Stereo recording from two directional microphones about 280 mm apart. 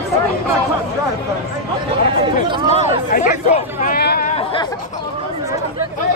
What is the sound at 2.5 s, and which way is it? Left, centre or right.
Chatter, centre.